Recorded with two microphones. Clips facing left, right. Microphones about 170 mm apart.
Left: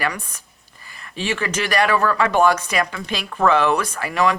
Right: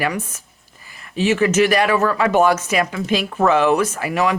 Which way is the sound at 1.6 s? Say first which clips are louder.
Right 2 dB; 10° right (ahead or behind).